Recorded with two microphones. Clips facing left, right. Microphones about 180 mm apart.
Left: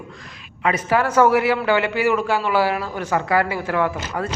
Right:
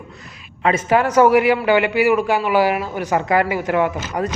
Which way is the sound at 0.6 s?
20° right (ahead or behind).